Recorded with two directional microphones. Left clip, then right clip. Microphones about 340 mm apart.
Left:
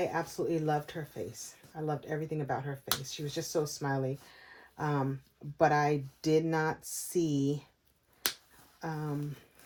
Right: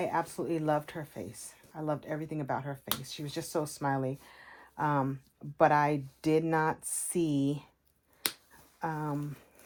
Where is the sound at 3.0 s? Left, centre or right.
Centre.